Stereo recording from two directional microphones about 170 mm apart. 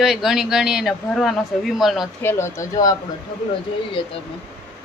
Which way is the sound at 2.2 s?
15° left (ahead or behind).